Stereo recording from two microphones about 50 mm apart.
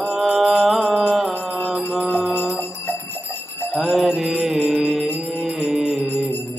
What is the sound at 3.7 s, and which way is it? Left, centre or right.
Music, centre.